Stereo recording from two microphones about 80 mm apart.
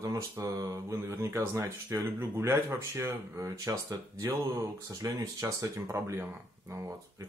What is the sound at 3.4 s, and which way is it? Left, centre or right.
Speech, right.